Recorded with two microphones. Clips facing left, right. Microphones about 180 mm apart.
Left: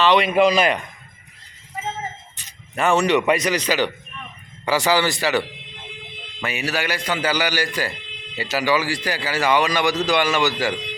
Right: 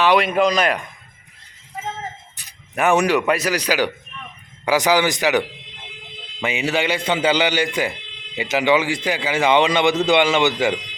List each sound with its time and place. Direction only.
0.0 s a man's voice: 10° right (ahead or behind)
0.3 s speech: 5° left (ahead or behind)
2.7 s a man's voice: 15° right (ahead or behind)
3.2 s a man's voice: 5° right (ahead or behind); by 10.8 s 20° right (ahead or behind)